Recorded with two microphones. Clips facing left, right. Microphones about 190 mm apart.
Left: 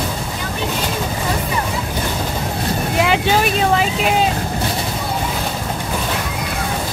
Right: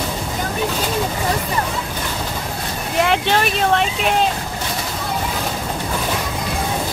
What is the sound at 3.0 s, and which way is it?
Vehicle, centre (ahead or behind).